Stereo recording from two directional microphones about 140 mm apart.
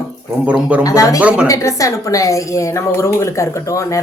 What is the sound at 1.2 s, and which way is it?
Speech, 10° right (ahead or behind).